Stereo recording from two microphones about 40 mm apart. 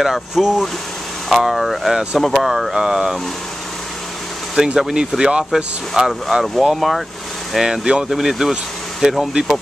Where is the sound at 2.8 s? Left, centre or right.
Centre.